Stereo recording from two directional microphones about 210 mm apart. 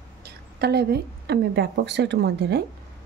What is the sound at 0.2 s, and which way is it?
A woman's voice, 50° right (ahead or behind).